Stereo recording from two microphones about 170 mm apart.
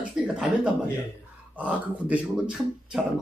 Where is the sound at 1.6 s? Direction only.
10° right (ahead or behind).